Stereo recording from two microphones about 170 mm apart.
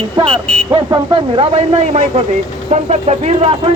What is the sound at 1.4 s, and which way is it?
Speech, 35° right (ahead or behind).